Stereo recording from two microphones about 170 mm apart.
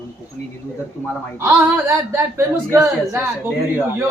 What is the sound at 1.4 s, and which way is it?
Speech, 15° right (ahead or behind).